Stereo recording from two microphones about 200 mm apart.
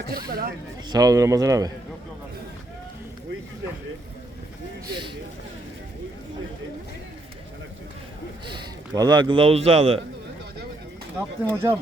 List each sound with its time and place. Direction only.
0.1 s speech: 50° right (ahead or behind)
0.9 s a man's voice: 20° right (ahead or behind)
8.4 s speech: 25° right (ahead or behind)
11.4 s a man's voice: 10° right (ahead or behind)